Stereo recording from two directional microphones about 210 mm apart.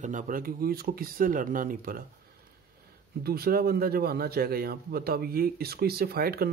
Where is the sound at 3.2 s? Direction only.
45° right (ahead or behind).